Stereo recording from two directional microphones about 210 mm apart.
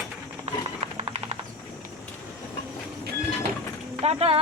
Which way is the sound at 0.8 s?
30° right (ahead or behind).